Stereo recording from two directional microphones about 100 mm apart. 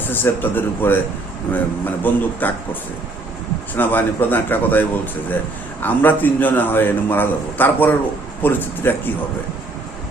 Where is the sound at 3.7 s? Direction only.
20° left (ahead or behind).